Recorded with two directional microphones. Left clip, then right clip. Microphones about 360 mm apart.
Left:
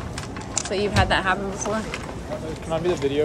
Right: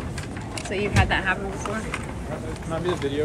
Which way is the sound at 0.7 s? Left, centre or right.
Centre.